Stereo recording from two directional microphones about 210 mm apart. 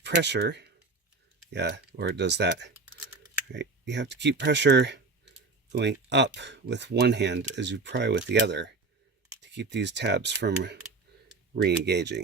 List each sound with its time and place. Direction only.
0.0 s speech: 55° right (ahead or behind)